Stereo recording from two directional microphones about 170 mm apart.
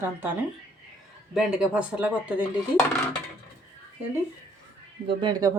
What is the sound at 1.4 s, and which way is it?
Speech, 5° right (ahead or behind).